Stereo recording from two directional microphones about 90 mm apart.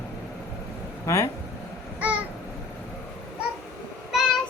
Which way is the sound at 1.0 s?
35° left (ahead or behind).